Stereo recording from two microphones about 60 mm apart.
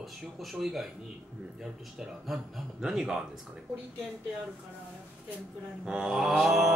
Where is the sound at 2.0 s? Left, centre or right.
Centre.